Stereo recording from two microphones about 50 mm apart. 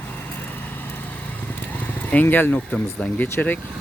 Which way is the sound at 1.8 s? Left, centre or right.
Left.